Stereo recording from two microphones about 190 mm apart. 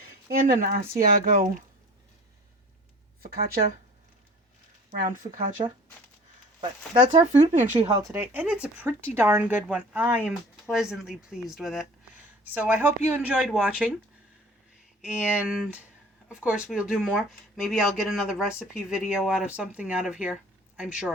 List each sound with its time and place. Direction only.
0.3 s speech: 50° right (ahead or behind)
4.9 s speech: 45° right (ahead or behind)
7.2 s speech: 35° right (ahead or behind)
7.9 s speech: 15° right (ahead or behind)
15.0 s speech: 5° right (ahead or behind)